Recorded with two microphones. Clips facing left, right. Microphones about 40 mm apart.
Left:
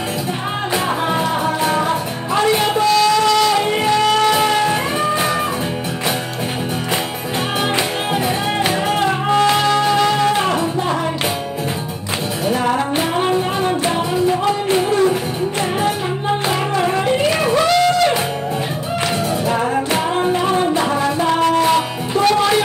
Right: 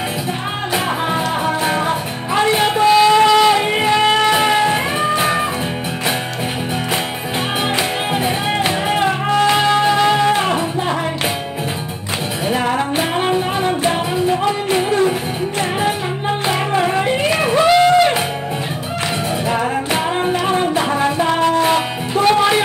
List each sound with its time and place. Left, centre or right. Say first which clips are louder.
1.4 s music: even; right
8.5 s music: even; centre
12.4 s music: even; right
16.4 s music: right 3 dB; right
17.4 s a sound: right 2 dB; centre
19.6 s music: left 1 dB; centre
20.7 s music: right 1 dB; centre